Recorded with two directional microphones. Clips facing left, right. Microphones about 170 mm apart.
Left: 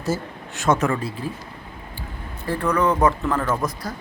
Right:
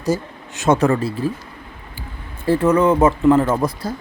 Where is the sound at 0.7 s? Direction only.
35° right (ahead or behind).